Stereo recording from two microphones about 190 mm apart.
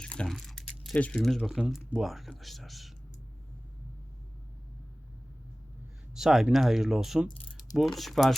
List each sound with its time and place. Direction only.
0.0 s a sound: 5° left (ahead or behind)
1.9 s speech: centre (ahead or behind)
6.1 s speech: centre (ahead or behind)